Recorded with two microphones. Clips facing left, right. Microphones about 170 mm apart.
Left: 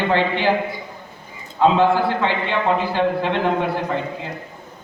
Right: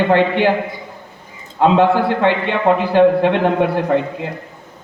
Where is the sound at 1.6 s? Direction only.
60° right (ahead or behind).